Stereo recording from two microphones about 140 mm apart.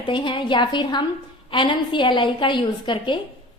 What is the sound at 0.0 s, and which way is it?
A woman's voice, 35° left (ahead or behind).